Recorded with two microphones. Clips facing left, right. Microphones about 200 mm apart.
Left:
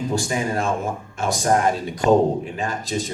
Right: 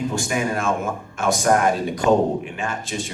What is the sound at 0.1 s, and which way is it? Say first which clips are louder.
Speech: even; 35° left (ahead or behind).